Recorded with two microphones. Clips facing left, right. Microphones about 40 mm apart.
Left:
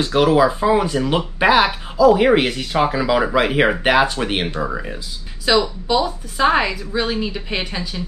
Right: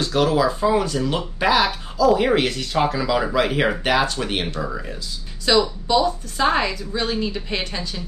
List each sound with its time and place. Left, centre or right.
0.0 s speech: left
5.4 s a woman's voice: centre